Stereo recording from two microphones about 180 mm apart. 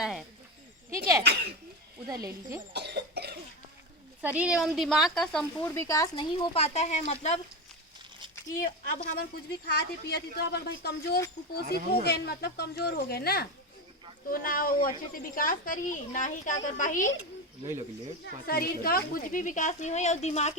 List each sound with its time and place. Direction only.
0.0 s a sound: centre (ahead or behind)
1.2 s speech: 70° right (ahead or behind)
2.0 s speech: 20° right (ahead or behind)
2.7 s cough: 70° right (ahead or behind)
4.2 s speech: 5° right (ahead or behind)
5.6 s speech: 15° left (ahead or behind); by 7.3 s 40° left (ahead or behind)
9.1 s speech: 55° left (ahead or behind)
18.4 s speech: 55° left (ahead or behind); by 20.5 s 40° left (ahead or behind)